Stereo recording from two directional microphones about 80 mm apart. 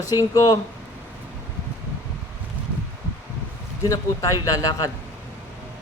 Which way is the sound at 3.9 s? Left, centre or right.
Left.